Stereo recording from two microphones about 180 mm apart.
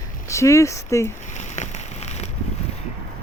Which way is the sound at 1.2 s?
40° left (ahead or behind).